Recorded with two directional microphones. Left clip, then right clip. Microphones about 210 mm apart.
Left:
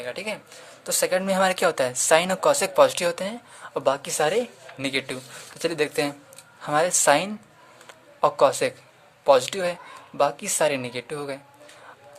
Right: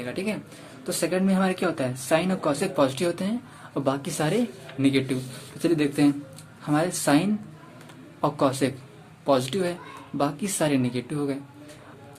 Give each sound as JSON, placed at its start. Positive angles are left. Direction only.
{"t": 0.0, "sound": "a man's voice", "side_deg": 30}